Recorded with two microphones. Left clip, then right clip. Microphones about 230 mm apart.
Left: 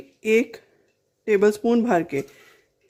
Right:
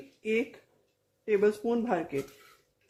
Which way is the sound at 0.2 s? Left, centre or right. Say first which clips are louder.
Left 10 dB; left.